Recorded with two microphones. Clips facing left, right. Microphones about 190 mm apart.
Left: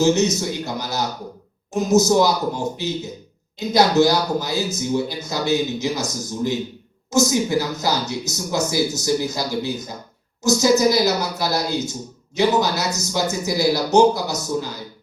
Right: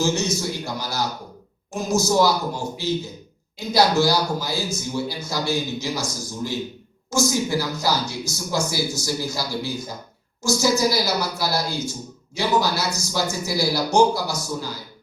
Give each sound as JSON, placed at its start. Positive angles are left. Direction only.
{"t": 0.0, "sound": "speech", "side_deg": 20}
{"t": 3.7, "sound": "speech", "side_deg": 20}